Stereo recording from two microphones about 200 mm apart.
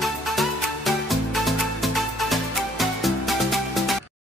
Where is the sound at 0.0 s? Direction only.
Centre (ahead or behind).